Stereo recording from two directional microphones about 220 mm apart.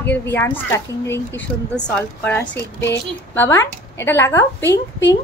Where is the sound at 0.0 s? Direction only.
10° left (ahead or behind).